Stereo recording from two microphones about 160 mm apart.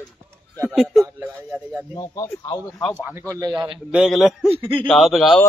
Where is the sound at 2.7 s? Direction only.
5° left (ahead or behind).